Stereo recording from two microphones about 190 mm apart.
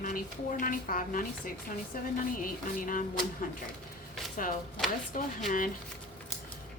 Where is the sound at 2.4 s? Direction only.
45° left (ahead or behind).